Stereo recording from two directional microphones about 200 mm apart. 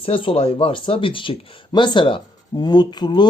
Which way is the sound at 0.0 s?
25° left (ahead or behind).